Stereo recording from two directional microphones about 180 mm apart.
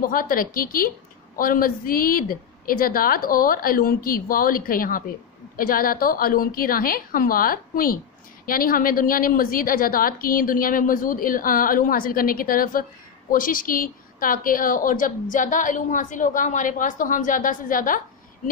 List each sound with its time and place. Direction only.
0.0 s a woman's voice: 50° left (ahead or behind)